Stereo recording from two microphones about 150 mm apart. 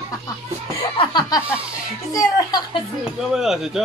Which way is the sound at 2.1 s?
25° left (ahead or behind).